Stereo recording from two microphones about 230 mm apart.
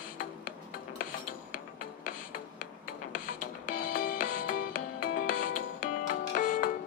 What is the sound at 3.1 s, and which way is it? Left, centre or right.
Music, left.